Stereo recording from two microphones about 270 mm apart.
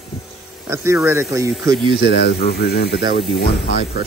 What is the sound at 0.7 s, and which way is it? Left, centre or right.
Speech, centre.